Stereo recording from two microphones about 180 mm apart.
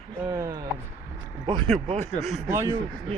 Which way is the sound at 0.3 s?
15° right (ahead or behind).